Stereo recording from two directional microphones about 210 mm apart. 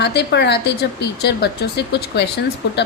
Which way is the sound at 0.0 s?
55° left (ahead or behind).